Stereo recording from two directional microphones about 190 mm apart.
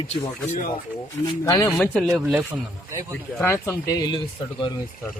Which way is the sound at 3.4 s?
15° left (ahead or behind).